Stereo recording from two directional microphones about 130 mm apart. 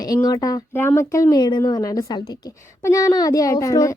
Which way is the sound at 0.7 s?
15° left (ahead or behind).